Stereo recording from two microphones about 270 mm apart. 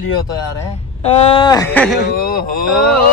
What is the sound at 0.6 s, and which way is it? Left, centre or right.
Speech, left.